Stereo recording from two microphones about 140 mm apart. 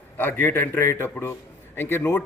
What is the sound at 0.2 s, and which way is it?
A man's voice, 15° left (ahead or behind).